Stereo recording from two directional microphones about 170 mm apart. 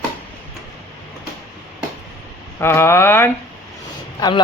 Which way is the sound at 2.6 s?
15° left (ahead or behind).